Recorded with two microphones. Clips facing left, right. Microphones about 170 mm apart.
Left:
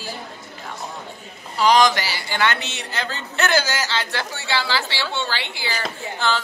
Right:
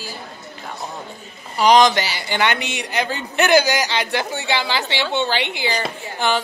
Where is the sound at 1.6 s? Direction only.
20° right (ahead or behind).